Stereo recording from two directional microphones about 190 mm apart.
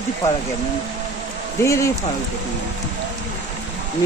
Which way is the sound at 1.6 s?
15° left (ahead or behind).